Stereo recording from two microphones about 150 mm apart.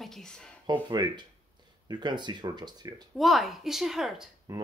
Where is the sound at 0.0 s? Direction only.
5° left (ahead or behind).